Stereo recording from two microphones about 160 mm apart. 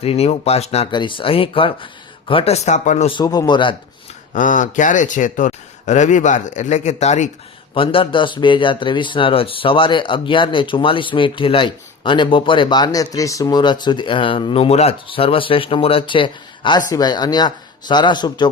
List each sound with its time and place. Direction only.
0.0 s a man's voice: 40° left (ahead or behind)
3.1 s a man's voice: 25° left (ahead or behind)
4.4 s speech: 55° left (ahead or behind)
7.7 s a man's voice: 30° left (ahead or behind)